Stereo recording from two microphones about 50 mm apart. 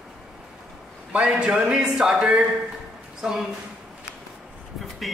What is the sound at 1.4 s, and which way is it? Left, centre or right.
Speech, centre.